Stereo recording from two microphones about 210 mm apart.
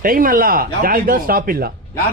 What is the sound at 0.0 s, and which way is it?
Speech, 40° right (ahead or behind).